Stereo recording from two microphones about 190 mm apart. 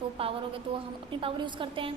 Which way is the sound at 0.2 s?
30° right (ahead or behind).